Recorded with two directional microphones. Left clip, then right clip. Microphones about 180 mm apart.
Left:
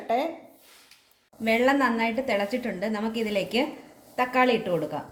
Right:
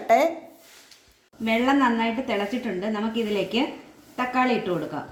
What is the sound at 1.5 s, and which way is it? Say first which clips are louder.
A woman's voice: right 1 dB; 35° left (ahead or behind).